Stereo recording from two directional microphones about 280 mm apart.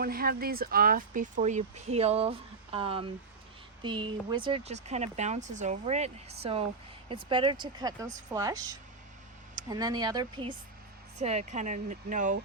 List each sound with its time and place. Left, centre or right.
0.0 s speech: right